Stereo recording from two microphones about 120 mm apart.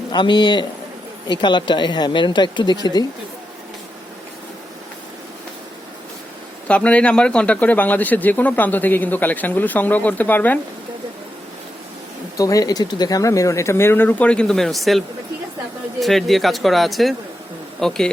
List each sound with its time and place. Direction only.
0.1 s speech: 40° left (ahead or behind)
6.7 s a man's voice: 10° left (ahead or behind)
12.4 s speech: 30° left (ahead or behind); by 18.1 s 5° left (ahead or behind)